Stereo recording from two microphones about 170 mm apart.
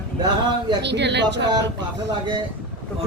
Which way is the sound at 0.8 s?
90° right.